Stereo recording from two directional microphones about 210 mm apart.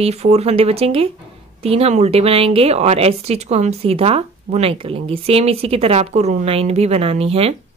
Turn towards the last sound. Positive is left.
turn(degrees=-30)  # may be behind; listen again after turning